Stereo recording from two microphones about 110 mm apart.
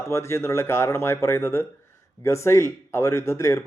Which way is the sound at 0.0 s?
25° left (ahead or behind).